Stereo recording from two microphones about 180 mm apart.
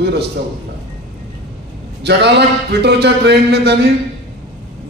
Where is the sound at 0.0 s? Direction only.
65° right (ahead or behind).